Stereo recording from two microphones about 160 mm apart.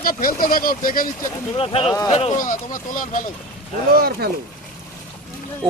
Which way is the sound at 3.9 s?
75° right (ahead or behind).